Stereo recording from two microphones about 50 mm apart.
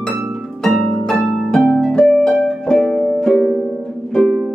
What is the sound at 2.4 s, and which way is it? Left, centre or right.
Music, centre.